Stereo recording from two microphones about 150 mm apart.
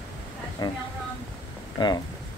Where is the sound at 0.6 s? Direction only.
25° left (ahead or behind).